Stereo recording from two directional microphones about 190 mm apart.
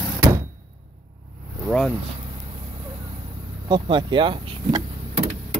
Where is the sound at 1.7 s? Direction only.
Centre (ahead or behind).